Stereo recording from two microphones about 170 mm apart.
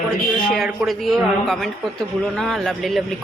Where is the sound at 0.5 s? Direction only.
Centre (ahead or behind).